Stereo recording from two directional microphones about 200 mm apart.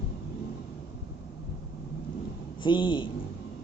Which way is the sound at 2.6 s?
25° left (ahead or behind).